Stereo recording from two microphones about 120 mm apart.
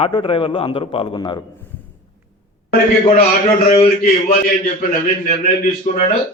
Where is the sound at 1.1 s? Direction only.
35° left (ahead or behind).